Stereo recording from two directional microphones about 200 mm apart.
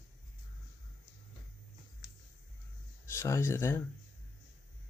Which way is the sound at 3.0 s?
15° left (ahead or behind).